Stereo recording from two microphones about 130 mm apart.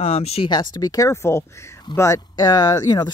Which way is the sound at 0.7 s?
30° left (ahead or behind).